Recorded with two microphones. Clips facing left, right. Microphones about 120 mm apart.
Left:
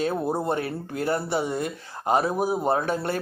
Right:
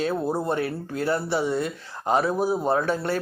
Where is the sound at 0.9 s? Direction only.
50° left (ahead or behind).